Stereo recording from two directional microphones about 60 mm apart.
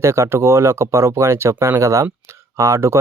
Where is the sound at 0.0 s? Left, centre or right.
Right.